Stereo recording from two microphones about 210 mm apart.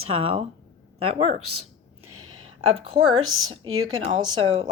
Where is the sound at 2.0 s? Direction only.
90° right.